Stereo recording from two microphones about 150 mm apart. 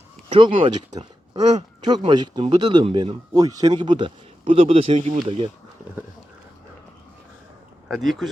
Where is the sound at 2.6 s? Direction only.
30° right (ahead or behind).